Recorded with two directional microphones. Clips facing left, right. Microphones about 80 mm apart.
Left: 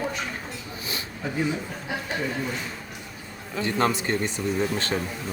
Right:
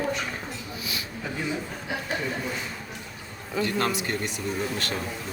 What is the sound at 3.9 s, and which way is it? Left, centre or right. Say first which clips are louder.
Speech: left 3 dB; left.